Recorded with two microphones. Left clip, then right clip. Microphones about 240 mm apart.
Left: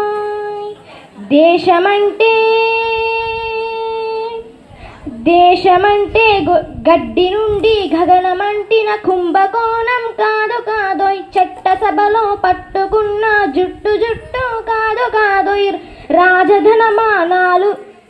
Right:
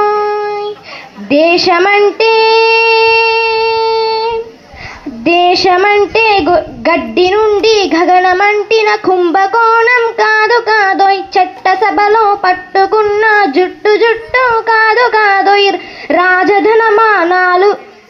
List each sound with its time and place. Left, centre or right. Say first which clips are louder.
0.0 s child singing: right 6 dB; right
5.2 s a woman's voice: even; right
13.6 s a sound: right 5 dB; right